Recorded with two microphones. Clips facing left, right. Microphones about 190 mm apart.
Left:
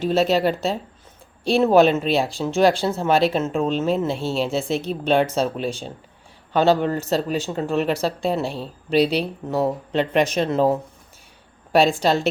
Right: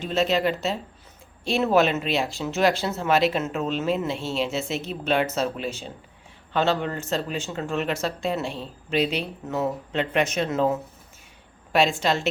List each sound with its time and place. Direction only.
0.0 s speech: 40° left (ahead or behind)
12.0 s speech: 35° left (ahead or behind)